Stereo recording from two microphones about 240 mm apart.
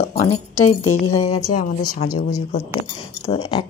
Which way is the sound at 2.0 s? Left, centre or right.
Left.